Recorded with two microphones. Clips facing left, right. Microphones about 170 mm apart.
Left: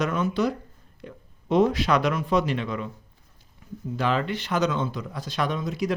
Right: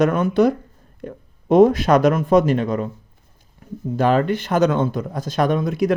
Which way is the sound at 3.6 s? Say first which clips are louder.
Right 6 dB; 55° right (ahead or behind).